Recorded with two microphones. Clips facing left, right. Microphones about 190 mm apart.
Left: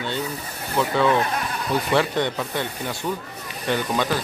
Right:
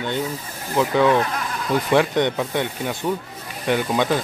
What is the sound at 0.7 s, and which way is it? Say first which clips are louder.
Speech: right 3 dB; 15° right (ahead or behind).